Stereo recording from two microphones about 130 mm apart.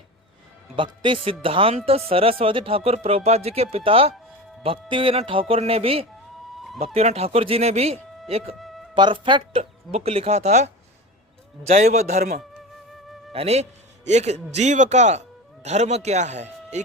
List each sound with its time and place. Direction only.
0.8 s speech: 40° right (ahead or behind)
8.5 s music: centre (ahead or behind)
9.0 s speech: 40° right (ahead or behind); by 10.7 s 60° right (ahead or behind)
11.7 s a man's voice: 60° right (ahead or behind)
12.9 s music: centre (ahead or behind)
13.3 s a man's voice: 50° right (ahead or behind)